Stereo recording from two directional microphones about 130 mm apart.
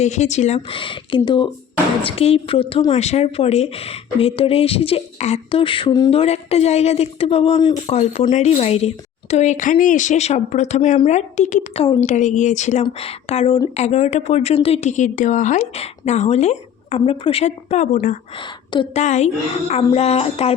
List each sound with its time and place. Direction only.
0.0 s a woman's voice: 60° left (ahead or behind)
0.7 s speech: 40° left (ahead or behind)
2.0 s a woman's voice: 50° left (ahead or behind)
2.9 s a woman's voice: 60° left (ahead or behind); by 6.1 s 35° left (ahead or behind)
6.1 s a woman's voice: 50° left (ahead or behind)
9.3 s a woman's voice: 65° left (ahead or behind)
12.8 s a woman's voice: 50° left (ahead or behind); by 15.8 s 70° left (ahead or behind)
15.8 s a woman's voice: 60° left (ahead or behind)
18.3 s a woman's voice: 40° left (ahead or behind)
18.9 s a woman's voice: 60° left (ahead or behind)